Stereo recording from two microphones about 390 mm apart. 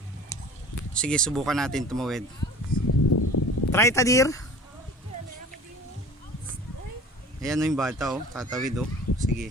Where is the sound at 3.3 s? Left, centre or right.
Left.